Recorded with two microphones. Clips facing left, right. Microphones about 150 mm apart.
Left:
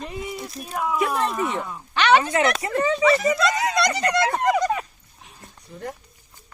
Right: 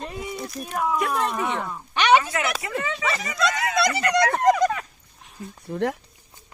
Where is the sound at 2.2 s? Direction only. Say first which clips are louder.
Left 6 dB; 30° left (ahead or behind).